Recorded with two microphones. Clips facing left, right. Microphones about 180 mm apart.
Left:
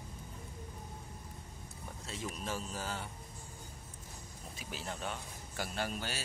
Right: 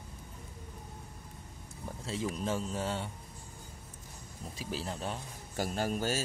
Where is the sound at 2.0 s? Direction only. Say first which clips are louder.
Right 7 dB; 30° right (ahead or behind).